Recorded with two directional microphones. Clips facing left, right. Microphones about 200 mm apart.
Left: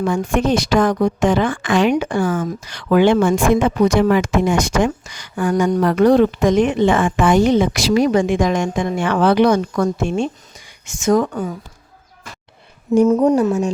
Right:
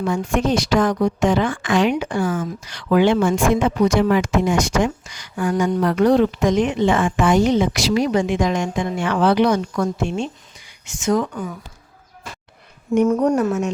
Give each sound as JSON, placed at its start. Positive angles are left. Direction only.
{"t": 0.0, "sound": "speech", "side_deg": 50}
{"t": 10.8, "sound": "speech", "side_deg": 45}
{"t": 13.1, "sound": "a woman's voice", "side_deg": 20}